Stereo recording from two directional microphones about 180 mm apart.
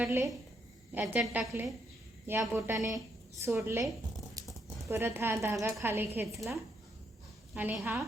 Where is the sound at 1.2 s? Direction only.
Centre (ahead or behind).